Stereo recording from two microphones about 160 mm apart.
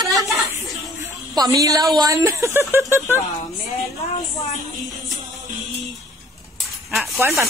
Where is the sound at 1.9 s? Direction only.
20° right (ahead or behind).